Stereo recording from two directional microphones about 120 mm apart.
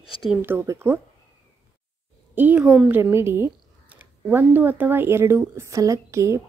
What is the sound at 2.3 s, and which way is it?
A woman's voice, 15° right (ahead or behind).